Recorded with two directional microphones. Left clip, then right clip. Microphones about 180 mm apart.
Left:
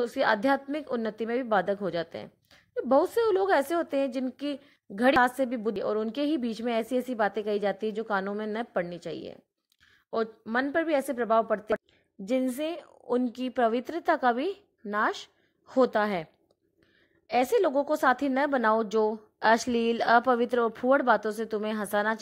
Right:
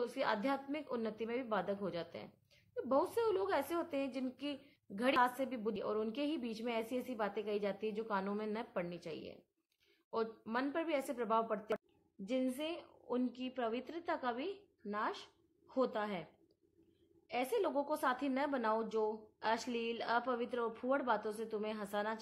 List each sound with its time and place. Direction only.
0.0 s a woman's voice: 35° left (ahead or behind)
17.3 s a woman's voice: 35° left (ahead or behind)